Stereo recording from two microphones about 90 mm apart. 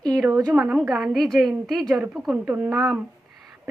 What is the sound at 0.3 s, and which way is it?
Speech, 40° right (ahead or behind).